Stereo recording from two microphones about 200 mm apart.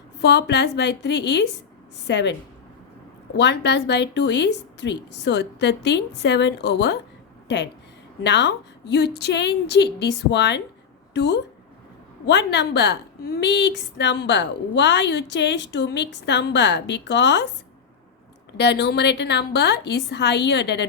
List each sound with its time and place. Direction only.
0.2 s a woman's voice: 60° left (ahead or behind)
3.3 s a woman's voice: 60° left (ahead or behind)
18.5 s a woman's voice: 60° left (ahead or behind)